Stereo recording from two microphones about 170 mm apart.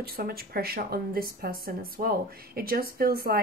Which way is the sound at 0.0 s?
60° right (ahead or behind).